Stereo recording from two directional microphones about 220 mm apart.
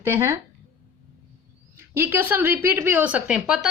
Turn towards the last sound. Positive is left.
turn(degrees=-5)  # may be behind; listen again after turning